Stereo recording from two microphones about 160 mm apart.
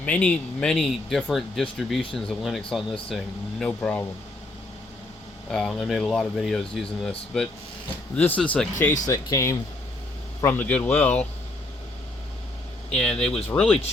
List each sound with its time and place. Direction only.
0.0 s speech: 10° left (ahead or behind)
5.5 s speech: centre (ahead or behind)
9.0 s speech: 20° left (ahead or behind)
12.9 s speech: 5° left (ahead or behind)